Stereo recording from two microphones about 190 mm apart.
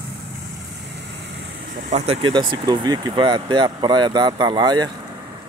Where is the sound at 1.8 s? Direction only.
35° right (ahead or behind).